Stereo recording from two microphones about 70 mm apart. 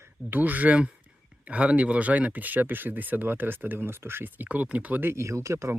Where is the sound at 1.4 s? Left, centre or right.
Centre.